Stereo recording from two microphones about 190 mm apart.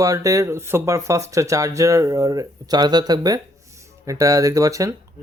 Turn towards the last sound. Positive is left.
turn(degrees=-15)  # may be behind; listen again after turning